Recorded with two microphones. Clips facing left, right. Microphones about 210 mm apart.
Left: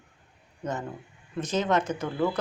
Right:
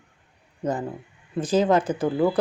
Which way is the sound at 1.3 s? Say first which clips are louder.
Right 6 dB; 30° right (ahead or behind).